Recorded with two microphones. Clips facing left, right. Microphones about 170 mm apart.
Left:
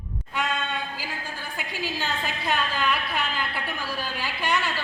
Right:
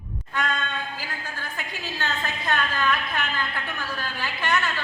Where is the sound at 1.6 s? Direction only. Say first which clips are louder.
Left 3 dB; 10° left (ahead or behind).